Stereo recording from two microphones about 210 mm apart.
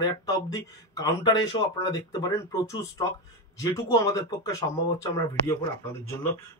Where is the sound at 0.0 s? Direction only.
15° left (ahead or behind).